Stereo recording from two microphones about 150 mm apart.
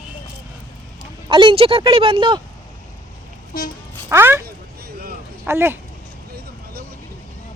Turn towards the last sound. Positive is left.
turn(degrees=-90)